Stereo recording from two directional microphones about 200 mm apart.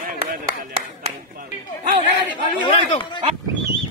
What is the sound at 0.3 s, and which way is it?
Clapping, 45° right (ahead or behind).